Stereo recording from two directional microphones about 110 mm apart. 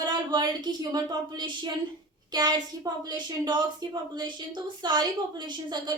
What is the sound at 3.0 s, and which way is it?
A woman's voice, 40° right (ahead or behind).